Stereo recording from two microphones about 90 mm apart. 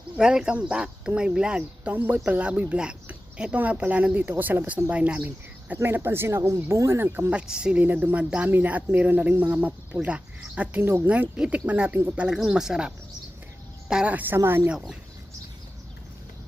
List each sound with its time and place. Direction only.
0.2 s speech: 10° right (ahead or behind); by 7.3 s 30° right (ahead or behind)
7.3 s speech: 10° right (ahead or behind); by 14.7 s 25° right (ahead or behind)
14.7 s speech: 5° right (ahead or behind)